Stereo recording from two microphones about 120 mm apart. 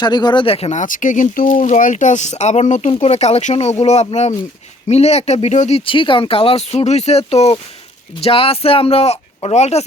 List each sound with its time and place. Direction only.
0.0 s speech: 35° left (ahead or behind); by 2.9 s 80° left
2.9 s speech: 65° left (ahead or behind)